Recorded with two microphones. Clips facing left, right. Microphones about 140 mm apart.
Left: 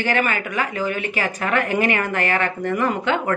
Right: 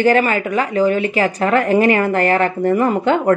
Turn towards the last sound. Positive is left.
turn(degrees=-40)  # may be behind; listen again after turning